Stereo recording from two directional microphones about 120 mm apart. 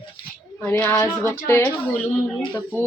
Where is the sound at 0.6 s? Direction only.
15° left (ahead or behind).